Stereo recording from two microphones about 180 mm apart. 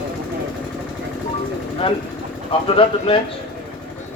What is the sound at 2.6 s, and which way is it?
Speech, 30° left (ahead or behind).